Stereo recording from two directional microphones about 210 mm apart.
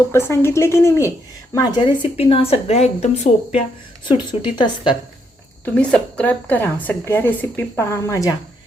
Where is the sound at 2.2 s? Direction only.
25° left (ahead or behind).